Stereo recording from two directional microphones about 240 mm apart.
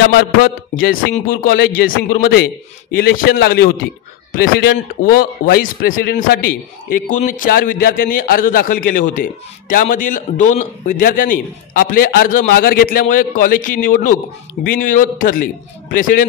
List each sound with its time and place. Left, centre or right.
0.2 s a man's voice: left